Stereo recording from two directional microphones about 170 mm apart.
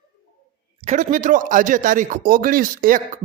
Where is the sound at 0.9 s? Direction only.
50° right (ahead or behind).